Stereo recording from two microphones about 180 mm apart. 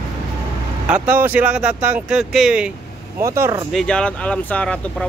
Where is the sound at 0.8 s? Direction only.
10° right (ahead or behind).